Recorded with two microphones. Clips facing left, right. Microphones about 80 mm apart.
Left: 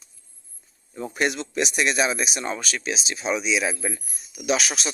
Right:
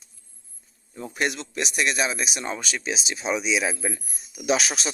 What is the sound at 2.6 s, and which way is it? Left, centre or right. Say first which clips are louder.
Speech: left 1 dB; centre.